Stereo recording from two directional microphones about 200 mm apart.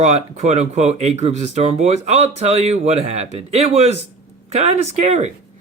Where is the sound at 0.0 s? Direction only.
35° right (ahead or behind).